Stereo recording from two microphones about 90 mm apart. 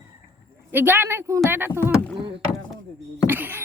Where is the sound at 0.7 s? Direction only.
25° right (ahead or behind).